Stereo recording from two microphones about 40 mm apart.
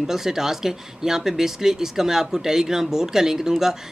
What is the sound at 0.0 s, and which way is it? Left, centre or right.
Speech, centre.